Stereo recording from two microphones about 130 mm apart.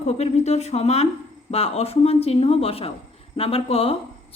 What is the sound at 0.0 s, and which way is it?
Speech, 55° left (ahead or behind).